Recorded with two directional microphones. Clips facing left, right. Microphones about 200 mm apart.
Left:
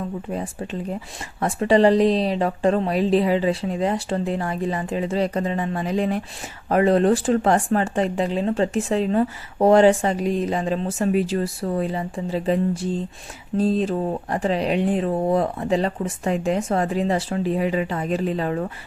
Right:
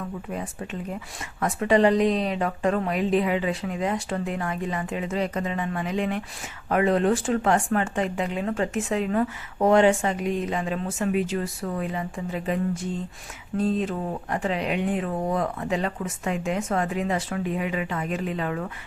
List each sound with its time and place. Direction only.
1.4 s speech: 30° left (ahead or behind)